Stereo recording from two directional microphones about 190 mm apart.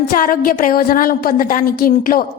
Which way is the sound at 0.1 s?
50° left (ahead or behind).